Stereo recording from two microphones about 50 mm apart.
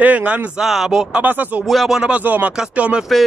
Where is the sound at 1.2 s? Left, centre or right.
Right.